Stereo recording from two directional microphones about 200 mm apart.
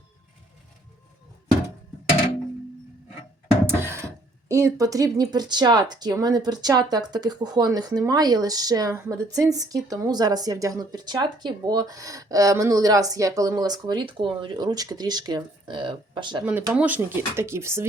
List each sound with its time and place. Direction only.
3.7 s speech: 10° right (ahead or behind)
16.4 s speech: 5° right (ahead or behind)